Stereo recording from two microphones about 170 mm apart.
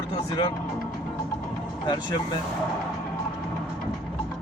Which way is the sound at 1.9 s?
25° left (ahead or behind).